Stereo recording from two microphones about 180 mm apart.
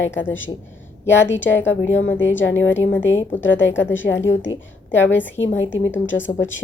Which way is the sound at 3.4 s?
90° left.